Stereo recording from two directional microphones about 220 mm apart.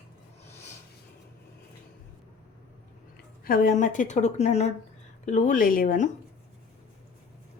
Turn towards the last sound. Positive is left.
turn(degrees=35)  # may be behind; listen again after turning